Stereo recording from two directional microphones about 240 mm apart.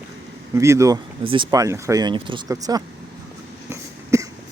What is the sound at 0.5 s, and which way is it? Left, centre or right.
Speech, centre.